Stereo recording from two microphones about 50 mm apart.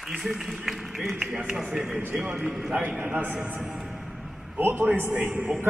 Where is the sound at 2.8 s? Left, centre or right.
Right.